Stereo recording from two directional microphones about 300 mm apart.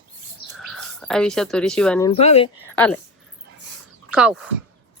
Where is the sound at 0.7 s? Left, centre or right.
Centre.